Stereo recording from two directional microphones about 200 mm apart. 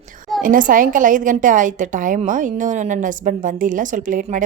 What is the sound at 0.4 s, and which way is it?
A woman's voice, 40° right (ahead or behind).